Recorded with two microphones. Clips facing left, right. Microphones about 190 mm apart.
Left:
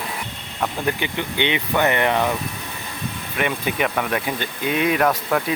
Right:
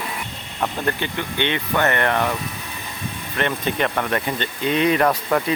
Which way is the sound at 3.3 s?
10° left (ahead or behind).